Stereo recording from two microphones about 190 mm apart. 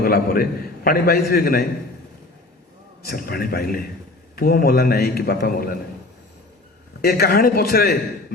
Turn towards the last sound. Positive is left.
turn(degrees=55)  # may be behind; listen again after turning